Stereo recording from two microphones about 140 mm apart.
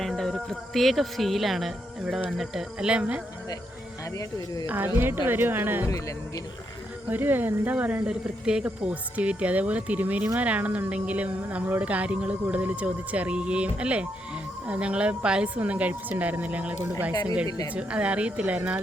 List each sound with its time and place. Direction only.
0.0 s speech: 5° left (ahead or behind)
4.6 s a woman's voice: 15° right (ahead or behind)
5.9 s speech: 25° left (ahead or behind)
7.1 s a woman's voice: 15° right (ahead or behind)